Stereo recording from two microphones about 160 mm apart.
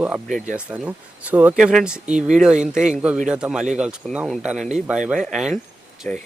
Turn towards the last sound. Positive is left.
turn(degrees=10)  # may be behind; listen again after turning